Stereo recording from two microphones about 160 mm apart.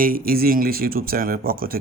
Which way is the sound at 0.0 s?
65° right (ahead or behind).